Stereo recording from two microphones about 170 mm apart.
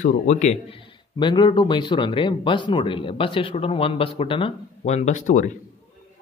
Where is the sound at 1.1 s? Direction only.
25° left (ahead or behind); by 5.6 s 45° left (ahead or behind).